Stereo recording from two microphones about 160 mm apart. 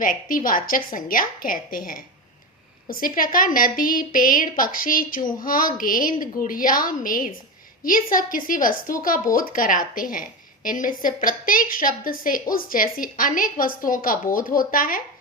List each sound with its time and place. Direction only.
0.0 s a woman's voice: 60° left (ahead or behind)